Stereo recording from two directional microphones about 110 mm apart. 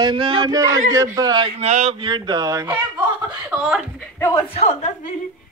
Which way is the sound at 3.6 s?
5° right (ahead or behind).